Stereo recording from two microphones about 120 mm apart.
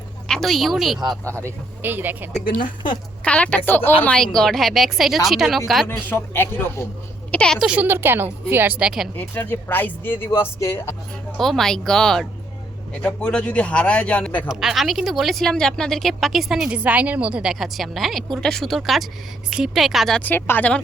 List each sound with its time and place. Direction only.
0.3 s speech: 5° left (ahead or behind)
1.8 s a woman's voice: 15° right (ahead or behind)
2.6 s speech: 40° left (ahead or behind)
3.2 s a woman's voice: 10° left (ahead or behind)
6.1 s speech: 20° left (ahead or behind)
7.3 s speech: 10° left (ahead or behind)
7.7 s a woman's voice: 15° right (ahead or behind)
9.1 s speech: 15° left (ahead or behind)
11.3 s a woman's voice: centre (ahead or behind)
14.4 s a woman's voice: 5° right (ahead or behind)
20.2 s speech: 15° left (ahead or behind)